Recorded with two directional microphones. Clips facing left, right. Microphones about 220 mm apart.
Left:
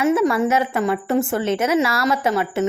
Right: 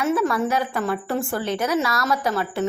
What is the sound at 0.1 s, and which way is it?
Speech, 20° left (ahead or behind).